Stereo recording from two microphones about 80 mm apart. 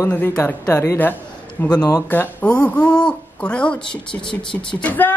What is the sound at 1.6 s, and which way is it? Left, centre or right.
A man's voice, left.